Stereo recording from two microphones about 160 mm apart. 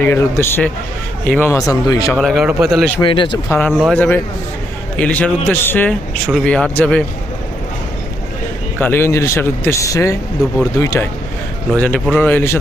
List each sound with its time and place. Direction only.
0.0 s speech: 15° left (ahead or behind)
2.1 s a man's voice: centre (ahead or behind)
3.0 s speech: 30° left (ahead or behind)
3.7 s a man's voice: centre (ahead or behind)
3.9 s speech: 10° left (ahead or behind)
8.8 s speech: 15° left (ahead or behind)
11.7 s speech: 5° left (ahead or behind)